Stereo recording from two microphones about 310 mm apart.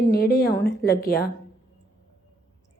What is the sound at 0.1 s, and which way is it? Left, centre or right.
A woman's voice, left.